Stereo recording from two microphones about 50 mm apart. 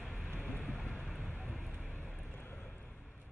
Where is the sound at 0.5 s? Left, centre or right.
Left.